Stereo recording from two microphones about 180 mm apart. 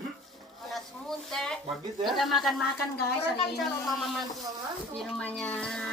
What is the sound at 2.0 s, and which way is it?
Speech, centre (ahead or behind).